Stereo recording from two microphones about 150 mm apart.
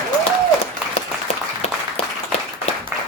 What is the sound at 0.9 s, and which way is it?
Applause, 45° left (ahead or behind).